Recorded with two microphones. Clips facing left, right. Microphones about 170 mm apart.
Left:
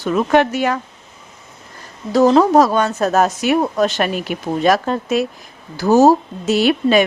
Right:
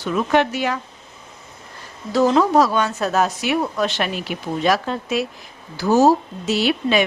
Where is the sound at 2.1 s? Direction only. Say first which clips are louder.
Left 4 dB; 40° left (ahead or behind).